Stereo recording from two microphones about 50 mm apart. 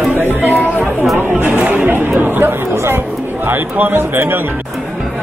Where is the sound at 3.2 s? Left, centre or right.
Right.